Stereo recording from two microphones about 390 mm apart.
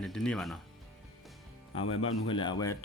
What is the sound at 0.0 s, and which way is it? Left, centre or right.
Speech, centre.